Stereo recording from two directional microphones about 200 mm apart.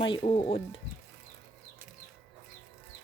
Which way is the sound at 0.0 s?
25° left (ahead or behind).